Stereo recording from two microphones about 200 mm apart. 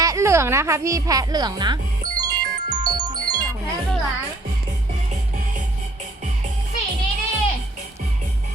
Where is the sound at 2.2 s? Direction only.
20° right (ahead or behind).